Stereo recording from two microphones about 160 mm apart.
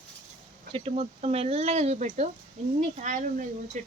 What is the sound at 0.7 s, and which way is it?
Speech, 35° right (ahead or behind).